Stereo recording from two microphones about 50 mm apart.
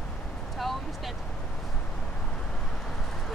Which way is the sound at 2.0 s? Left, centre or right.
Centre.